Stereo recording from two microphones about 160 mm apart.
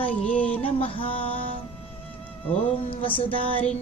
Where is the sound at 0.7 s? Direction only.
35° left (ahead or behind).